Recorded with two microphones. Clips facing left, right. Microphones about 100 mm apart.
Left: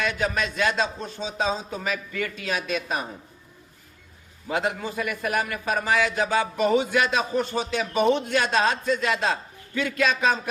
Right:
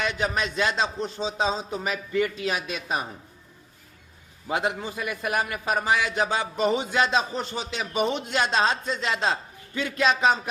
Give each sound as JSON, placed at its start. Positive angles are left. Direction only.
{"t": 0.0, "sound": "a man's voice", "side_deg": -20}
{"t": 4.4, "sound": "a man's voice", "side_deg": -20}